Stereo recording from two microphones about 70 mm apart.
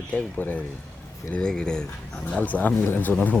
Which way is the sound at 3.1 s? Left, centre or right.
Left.